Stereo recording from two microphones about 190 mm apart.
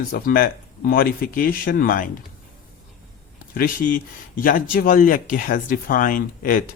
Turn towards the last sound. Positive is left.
turn(degrees=45)  # may be behind; listen again after turning